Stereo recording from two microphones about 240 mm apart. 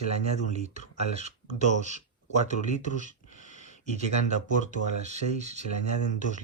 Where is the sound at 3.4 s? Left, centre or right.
Right.